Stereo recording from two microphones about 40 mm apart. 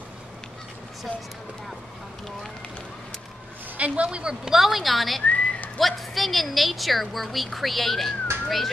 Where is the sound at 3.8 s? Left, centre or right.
Right.